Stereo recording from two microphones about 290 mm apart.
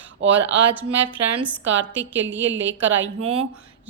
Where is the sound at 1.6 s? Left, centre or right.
Right.